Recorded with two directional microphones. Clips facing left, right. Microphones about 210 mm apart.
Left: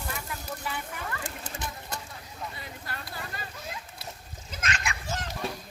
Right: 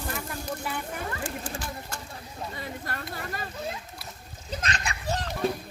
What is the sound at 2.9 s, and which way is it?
Vehicle, 45° right (ahead or behind).